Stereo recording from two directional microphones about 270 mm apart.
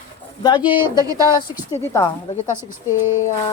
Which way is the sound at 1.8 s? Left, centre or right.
Centre.